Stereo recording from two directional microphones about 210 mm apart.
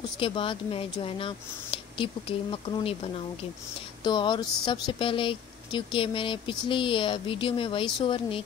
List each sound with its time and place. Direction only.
0.2 s speech: 25° left (ahead or behind)
4.0 s speech: 20° left (ahead or behind)